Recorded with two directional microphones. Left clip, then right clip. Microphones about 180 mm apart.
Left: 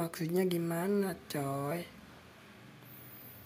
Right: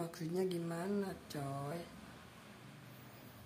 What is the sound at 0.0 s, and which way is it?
Speech, 35° left (ahead or behind).